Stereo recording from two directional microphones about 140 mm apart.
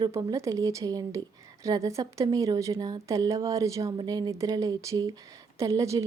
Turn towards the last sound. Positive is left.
turn(degrees=-25)  # may be behind; listen again after turning